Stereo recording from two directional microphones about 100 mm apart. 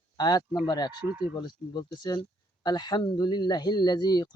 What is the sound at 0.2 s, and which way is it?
Speech, 40° left (ahead or behind).